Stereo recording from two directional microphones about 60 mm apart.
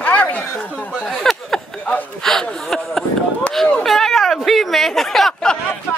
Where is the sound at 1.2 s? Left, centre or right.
Centre.